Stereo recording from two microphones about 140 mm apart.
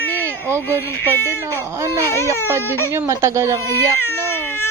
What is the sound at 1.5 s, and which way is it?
A woman's voice, 20° right (ahead or behind).